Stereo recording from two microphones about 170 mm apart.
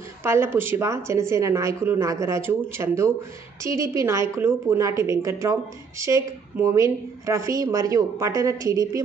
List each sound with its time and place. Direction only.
0.2 s speech: 15° right (ahead or behind)